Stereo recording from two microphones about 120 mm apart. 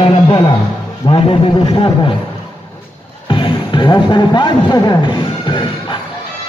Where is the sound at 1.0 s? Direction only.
45° left (ahead or behind).